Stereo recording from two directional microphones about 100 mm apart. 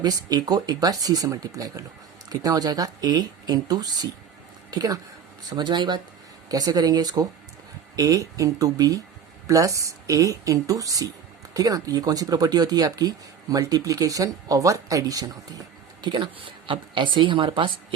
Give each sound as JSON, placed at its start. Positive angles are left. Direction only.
{"t": 0.0, "sound": "speech", "side_deg": -40}
{"t": 6.5, "sound": "speech", "side_deg": -40}